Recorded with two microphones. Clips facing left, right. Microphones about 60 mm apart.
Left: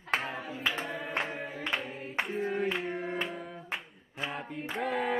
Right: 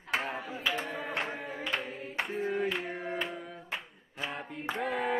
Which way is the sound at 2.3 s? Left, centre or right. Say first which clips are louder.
Right 1 dB; centre.